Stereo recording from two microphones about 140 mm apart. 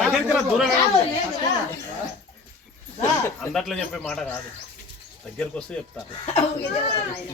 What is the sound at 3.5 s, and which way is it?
Speech, 5° left (ahead or behind).